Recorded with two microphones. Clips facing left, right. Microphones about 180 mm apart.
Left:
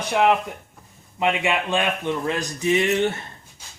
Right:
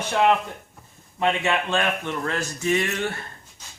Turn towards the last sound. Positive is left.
turn(degrees=20)  # may be behind; listen again after turning